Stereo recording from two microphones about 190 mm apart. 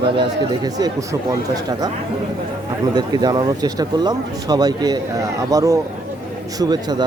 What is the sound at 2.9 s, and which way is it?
Speech, 20° right (ahead or behind).